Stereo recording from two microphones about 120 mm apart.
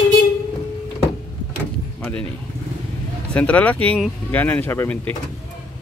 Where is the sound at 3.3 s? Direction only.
10° left (ahead or behind).